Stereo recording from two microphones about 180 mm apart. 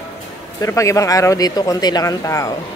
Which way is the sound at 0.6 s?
15° left (ahead or behind).